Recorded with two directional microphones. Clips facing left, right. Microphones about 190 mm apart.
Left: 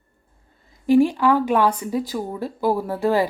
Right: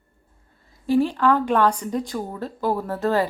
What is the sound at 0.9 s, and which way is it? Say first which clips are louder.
Speech: left 3 dB; 15° left (ahead or behind).